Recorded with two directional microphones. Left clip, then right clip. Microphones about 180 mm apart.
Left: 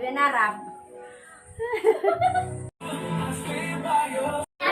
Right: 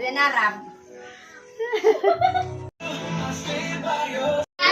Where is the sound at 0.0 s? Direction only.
15° right (ahead or behind).